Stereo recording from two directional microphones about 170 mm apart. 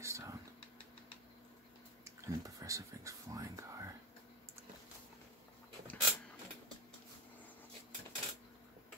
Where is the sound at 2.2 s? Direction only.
20° right (ahead or behind).